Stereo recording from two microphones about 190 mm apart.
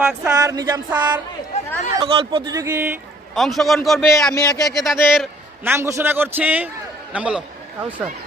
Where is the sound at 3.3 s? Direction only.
Centre (ahead or behind).